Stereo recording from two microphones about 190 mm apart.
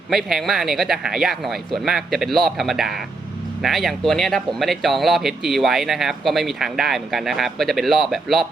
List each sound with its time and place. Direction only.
0.1 s speech: centre (ahead or behind)